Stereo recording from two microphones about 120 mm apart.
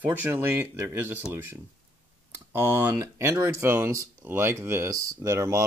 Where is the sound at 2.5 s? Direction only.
20° right (ahead or behind).